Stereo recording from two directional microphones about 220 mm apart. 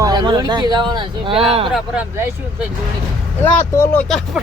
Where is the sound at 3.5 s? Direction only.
10° left (ahead or behind).